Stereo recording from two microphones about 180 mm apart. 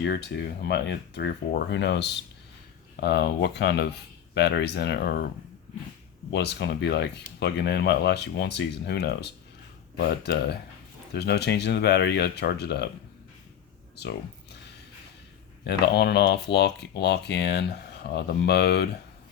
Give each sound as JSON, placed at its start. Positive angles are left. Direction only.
{"t": 0.0, "sound": "speech", "side_deg": 70}
{"t": 6.3, "sound": "speech", "side_deg": 75}
{"t": 15.6, "sound": "speech", "side_deg": 65}